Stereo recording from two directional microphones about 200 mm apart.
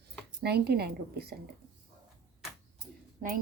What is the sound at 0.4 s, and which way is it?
Speech, 55° right (ahead or behind).